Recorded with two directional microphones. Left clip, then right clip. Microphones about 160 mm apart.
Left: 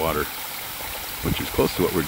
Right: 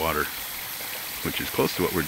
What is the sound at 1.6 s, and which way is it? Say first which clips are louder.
Speech: left 3 dB; 10° left (ahead or behind).